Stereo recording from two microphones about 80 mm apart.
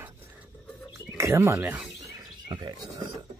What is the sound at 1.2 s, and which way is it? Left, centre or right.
Speech, right.